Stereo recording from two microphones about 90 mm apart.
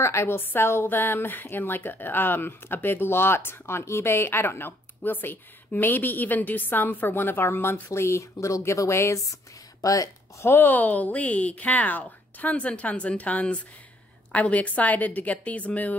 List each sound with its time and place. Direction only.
0.0 s a woman's voice: 30° left (ahead or behind)
10.5 s speech: 20° left (ahead or behind)